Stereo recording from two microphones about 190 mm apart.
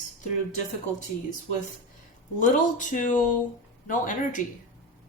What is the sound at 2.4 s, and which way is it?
Speech, 45° left (ahead or behind).